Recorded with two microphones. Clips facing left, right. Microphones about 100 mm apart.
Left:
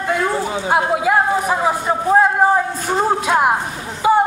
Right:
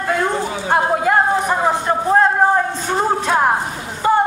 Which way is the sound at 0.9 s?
5° left (ahead or behind).